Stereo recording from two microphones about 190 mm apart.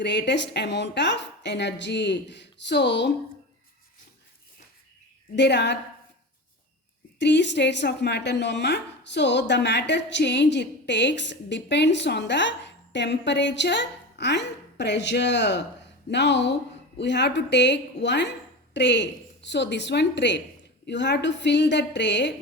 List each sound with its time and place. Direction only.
0.0 s a woman's voice: 65° left (ahead or behind)
5.4 s a woman's voice: 65° left (ahead or behind)
7.2 s a woman's voice: 65° left (ahead or behind)